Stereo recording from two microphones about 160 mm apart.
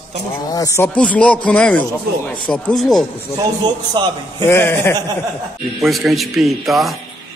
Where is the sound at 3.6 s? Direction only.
30° right (ahead or behind).